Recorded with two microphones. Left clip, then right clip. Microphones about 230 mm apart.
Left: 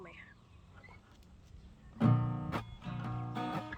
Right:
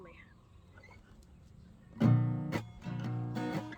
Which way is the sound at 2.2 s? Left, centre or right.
Right.